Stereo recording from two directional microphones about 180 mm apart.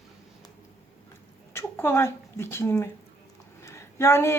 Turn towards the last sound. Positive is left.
turn(degrees=15)  # may be behind; listen again after turning